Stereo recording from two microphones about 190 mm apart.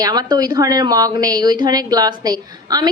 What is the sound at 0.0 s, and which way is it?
A woman's voice, 20° right (ahead or behind).